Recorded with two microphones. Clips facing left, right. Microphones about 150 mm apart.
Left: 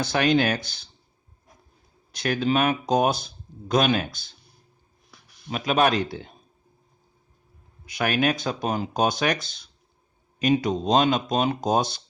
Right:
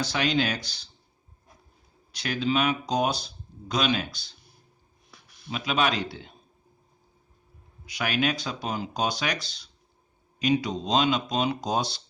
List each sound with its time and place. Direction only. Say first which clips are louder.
0.0 s speech: left 5 dB; 55° left (ahead or behind)
2.1 s speech: left 3 dB; 50° left (ahead or behind)
5.5 s speech: left 5 dB; 50° left (ahead or behind)
7.9 s speech: left 4 dB; 50° left (ahead or behind)